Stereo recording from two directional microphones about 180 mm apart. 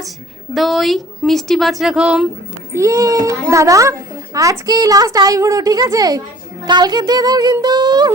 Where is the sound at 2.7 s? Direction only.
15° right (ahead or behind).